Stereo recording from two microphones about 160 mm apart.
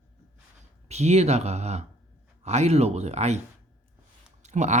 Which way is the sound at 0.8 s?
45° right (ahead or behind).